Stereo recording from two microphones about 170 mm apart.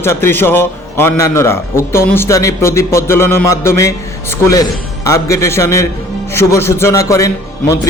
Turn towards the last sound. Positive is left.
turn(degrees=20)  # may be behind; listen again after turning